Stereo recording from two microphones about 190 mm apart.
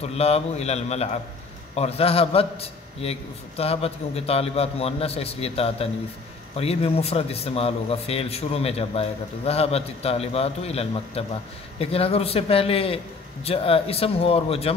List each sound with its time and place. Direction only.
0.0 s a man's voice: 35° left (ahead or behind)